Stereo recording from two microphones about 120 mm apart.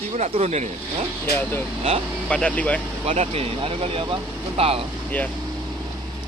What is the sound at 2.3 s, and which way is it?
Speech, 10° left (ahead or behind).